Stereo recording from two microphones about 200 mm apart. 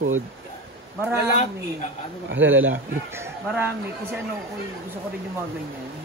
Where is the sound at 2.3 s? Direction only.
75° right (ahead or behind).